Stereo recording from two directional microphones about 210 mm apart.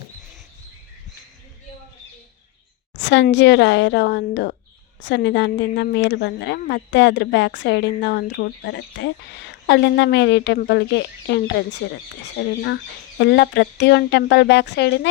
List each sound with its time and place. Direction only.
3.0 s a woman's voice: 55° left (ahead or behind)
12.6 s a woman's voice: 55° left (ahead or behind)